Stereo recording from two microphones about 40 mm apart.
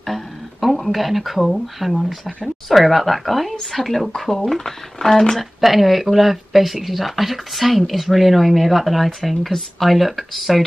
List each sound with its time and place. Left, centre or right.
0.0 s speech: centre
4.6 s speech: centre
5.3 s speech: centre